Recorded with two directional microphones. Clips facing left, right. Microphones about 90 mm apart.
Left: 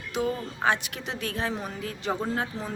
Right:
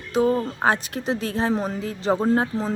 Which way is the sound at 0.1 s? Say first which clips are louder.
Right 8 dB; 35° right (ahead or behind).